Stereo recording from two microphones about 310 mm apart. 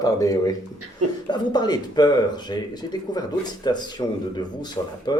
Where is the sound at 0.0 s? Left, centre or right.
Centre.